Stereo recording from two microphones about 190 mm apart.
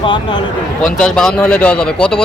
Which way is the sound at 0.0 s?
25° left (ahead or behind).